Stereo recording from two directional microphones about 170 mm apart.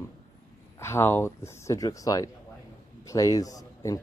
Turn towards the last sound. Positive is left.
turn(degrees=20)  # may be behind; listen again after turning